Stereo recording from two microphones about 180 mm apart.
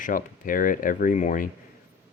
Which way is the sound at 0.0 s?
50° left (ahead or behind).